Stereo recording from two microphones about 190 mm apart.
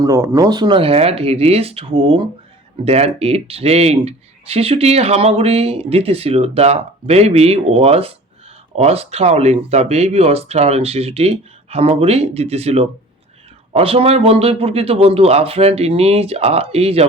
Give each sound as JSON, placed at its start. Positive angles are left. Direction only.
{"t": 0.0, "sound": "speech", "side_deg": -15}